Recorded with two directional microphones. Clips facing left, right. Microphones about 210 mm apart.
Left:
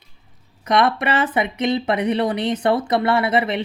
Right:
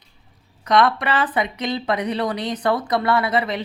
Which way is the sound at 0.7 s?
25° left (ahead or behind).